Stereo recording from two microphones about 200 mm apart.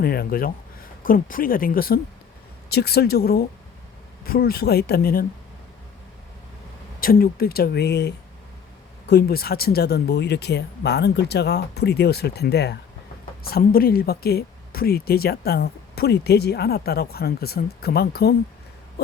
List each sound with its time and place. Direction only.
0.0 s speech: 50° left (ahead or behind)
7.0 s speech: 45° left (ahead or behind)